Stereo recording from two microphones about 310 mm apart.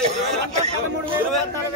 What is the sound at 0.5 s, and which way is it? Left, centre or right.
Speech, centre.